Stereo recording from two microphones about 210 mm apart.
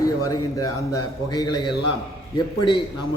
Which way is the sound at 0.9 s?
20° left (ahead or behind).